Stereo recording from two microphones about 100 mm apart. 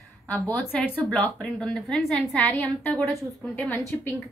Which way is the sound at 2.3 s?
15° left (ahead or behind).